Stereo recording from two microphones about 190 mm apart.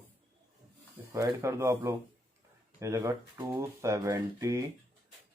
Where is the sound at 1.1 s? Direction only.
15° right (ahead or behind).